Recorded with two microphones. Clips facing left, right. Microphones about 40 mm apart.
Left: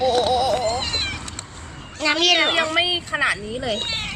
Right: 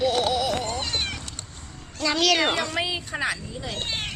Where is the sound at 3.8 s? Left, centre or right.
Left.